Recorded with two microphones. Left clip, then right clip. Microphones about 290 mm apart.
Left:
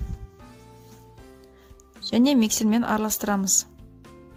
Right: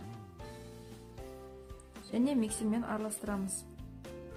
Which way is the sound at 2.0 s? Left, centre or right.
Left.